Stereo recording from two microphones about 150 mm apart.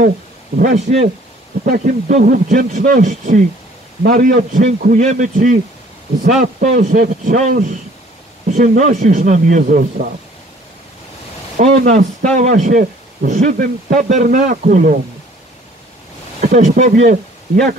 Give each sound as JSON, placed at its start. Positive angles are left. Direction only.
{"t": 0.6, "sound": "speech", "side_deg": -55}
{"t": 1.6, "sound": "speech", "side_deg": -70}
{"t": 2.0, "sound": "a man's voice", "side_deg": -55}
{"t": 4.0, "sound": "a man's voice", "side_deg": -70}
{"t": 11.6, "sound": "a man's voice", "side_deg": -50}
{"t": 16.3, "sound": "speech", "side_deg": -50}